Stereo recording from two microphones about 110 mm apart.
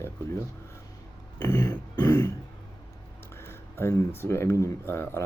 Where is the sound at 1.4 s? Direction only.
30° left (ahead or behind).